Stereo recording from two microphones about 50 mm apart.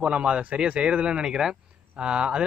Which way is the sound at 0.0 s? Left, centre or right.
Centre.